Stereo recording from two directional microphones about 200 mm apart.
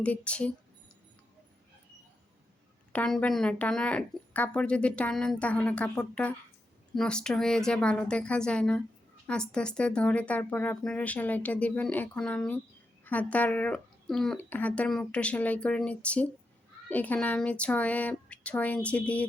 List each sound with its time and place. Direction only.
0.0 s speech: 5° left (ahead or behind)
2.9 s speech: 5° left (ahead or behind)